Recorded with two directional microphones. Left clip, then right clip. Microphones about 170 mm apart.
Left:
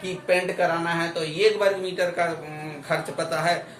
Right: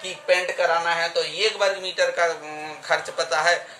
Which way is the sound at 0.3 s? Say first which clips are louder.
Right 2 dB; 35° right (ahead or behind).